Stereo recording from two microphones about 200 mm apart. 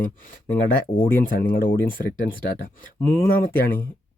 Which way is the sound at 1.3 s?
45° left (ahead or behind).